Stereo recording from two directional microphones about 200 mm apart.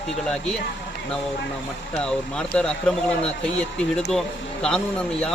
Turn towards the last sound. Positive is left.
turn(degrees=5)  # may be behind; listen again after turning